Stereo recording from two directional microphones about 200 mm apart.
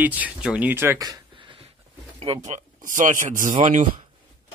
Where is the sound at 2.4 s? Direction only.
40° right (ahead or behind).